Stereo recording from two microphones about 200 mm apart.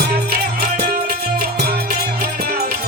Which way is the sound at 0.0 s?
50° right (ahead or behind).